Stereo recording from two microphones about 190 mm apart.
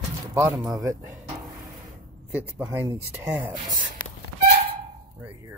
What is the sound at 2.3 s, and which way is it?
Speech, 10° right (ahead or behind).